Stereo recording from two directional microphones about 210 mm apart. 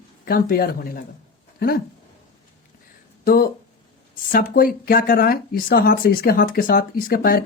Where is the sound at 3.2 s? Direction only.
45° left (ahead or behind).